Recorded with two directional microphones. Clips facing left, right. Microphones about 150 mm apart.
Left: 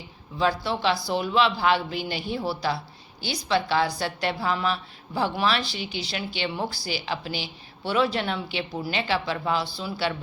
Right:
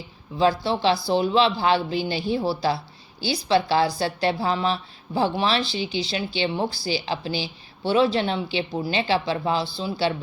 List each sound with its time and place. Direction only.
0.3 s a woman's voice: 30° right (ahead or behind)